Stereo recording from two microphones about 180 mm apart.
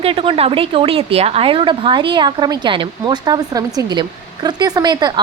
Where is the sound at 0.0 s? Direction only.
30° right (ahead or behind).